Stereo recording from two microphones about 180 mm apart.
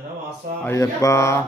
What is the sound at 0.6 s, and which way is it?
Mantra, 15° left (ahead or behind).